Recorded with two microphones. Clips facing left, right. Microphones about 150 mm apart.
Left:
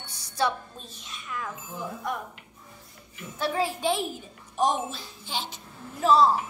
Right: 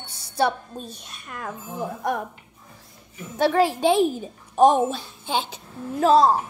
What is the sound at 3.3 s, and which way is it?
Speech, 70° right (ahead or behind).